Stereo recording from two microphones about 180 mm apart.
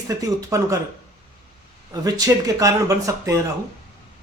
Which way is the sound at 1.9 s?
20° right (ahead or behind).